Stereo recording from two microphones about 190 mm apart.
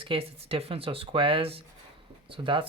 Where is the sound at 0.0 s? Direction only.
30° right (ahead or behind).